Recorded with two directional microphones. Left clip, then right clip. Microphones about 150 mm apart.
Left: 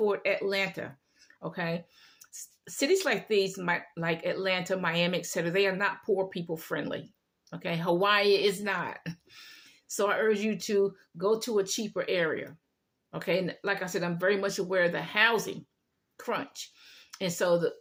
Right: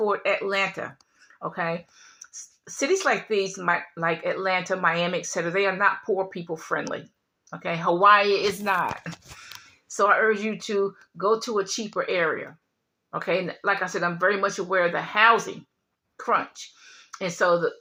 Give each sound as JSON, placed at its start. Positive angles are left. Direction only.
{"t": 0.1, "sound": "speech", "side_deg": 35}
{"t": 8.6, "sound": "speech", "side_deg": 0}
{"t": 9.9, "sound": "speech", "side_deg": 45}